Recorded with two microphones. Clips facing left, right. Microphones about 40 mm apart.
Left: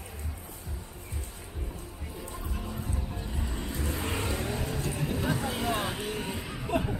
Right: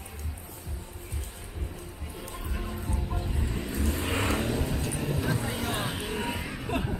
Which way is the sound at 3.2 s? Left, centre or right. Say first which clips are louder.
Right 3 dB; right.